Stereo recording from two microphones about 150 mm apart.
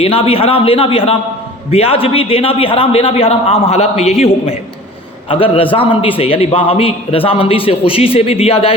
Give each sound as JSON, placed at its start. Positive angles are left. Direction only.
{"t": 0.0, "sound": "a man's voice", "side_deg": 40}